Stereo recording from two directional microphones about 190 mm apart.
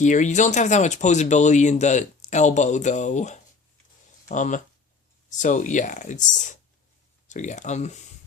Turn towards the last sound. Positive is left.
turn(degrees=35)  # may be behind; listen again after turning